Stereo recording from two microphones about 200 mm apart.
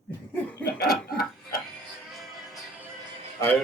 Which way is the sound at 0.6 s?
50° left (ahead or behind).